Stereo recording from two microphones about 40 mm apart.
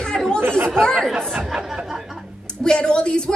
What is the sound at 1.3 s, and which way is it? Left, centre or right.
Speech, centre.